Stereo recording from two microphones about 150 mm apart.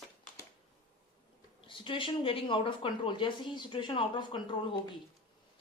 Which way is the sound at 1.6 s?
35° left (ahead or behind).